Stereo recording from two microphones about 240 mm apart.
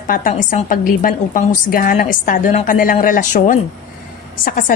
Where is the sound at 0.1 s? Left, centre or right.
Left.